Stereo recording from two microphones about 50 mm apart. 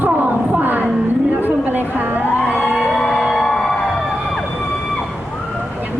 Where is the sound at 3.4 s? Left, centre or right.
Centre.